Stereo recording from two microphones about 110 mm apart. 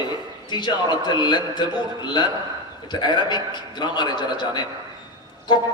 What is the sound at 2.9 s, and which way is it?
A man's voice, 40° left (ahead or behind).